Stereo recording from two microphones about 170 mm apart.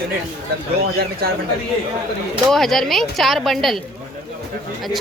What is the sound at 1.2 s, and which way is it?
Speech, 65° right (ahead or behind).